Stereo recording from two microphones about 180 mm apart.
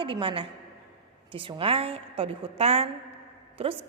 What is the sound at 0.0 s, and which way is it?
A woman's voice, 30° right (ahead or behind).